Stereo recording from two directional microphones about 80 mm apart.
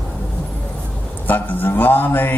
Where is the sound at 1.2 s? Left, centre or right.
Left.